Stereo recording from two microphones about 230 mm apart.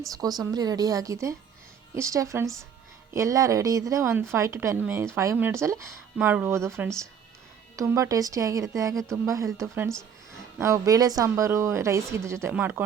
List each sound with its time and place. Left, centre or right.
0.1 s a woman's voice: centre